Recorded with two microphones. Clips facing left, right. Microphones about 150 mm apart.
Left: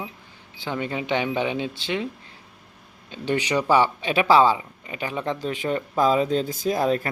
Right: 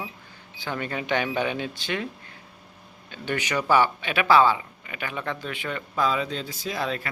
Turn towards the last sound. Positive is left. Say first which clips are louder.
# left 7 dB
turn(degrees=45)  # may be behind; listen again after turning